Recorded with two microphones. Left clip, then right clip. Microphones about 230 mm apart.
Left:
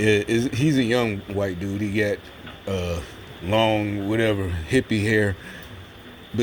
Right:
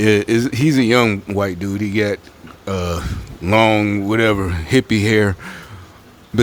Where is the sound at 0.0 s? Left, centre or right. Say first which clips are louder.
Right 5 dB; right.